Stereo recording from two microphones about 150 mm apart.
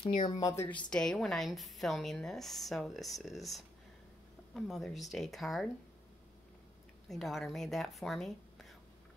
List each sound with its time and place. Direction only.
0.3 s speech: 25° left (ahead or behind)
0.8 s a woman's voice: 5° left (ahead or behind)
7.1 s speech: centre (ahead or behind)